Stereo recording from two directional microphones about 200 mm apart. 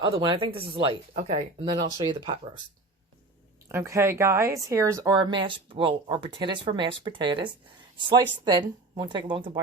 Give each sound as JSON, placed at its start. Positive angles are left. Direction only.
{"t": 0.0, "sound": "speech", "side_deg": -25}
{"t": 3.7, "sound": "speech", "side_deg": -15}